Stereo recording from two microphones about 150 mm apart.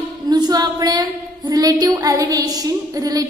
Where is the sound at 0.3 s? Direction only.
25° right (ahead or behind).